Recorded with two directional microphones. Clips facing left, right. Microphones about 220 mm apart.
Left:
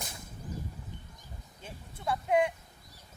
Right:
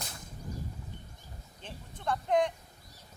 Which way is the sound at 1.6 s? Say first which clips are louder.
Right 1 dB; 10° left (ahead or behind).